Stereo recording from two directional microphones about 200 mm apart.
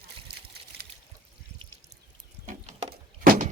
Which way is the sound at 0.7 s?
50° right (ahead or behind).